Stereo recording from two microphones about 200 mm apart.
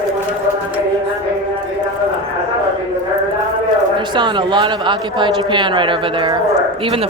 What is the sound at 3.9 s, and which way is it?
A man's voice, 20° right (ahead or behind).